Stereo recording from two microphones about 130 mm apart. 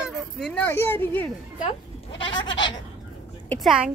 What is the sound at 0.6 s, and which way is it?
Speech, 15° left (ahead or behind).